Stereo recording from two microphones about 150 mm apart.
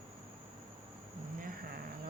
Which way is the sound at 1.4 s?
70° right (ahead or behind).